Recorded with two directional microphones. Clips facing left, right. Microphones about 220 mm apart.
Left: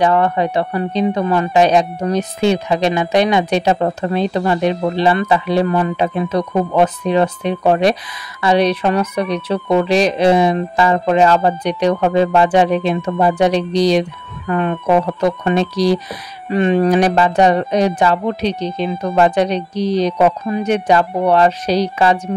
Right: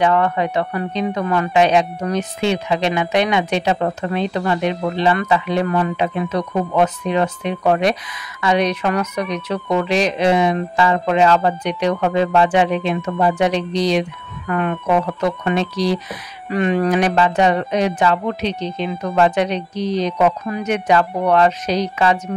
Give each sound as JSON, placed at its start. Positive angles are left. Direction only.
{"t": 0.0, "sound": "speech", "side_deg": 35}
{"t": 1.5, "sound": "speech", "side_deg": 40}
{"t": 16.4, "sound": "speech", "side_deg": 25}